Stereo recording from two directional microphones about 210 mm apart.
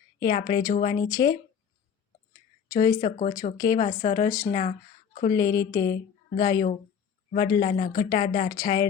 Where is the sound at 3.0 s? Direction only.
35° left (ahead or behind).